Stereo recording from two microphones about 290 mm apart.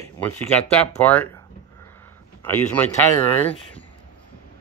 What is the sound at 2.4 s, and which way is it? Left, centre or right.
Speech, centre.